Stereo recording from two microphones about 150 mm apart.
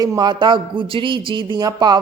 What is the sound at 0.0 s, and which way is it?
A man's voice, 30° right (ahead or behind).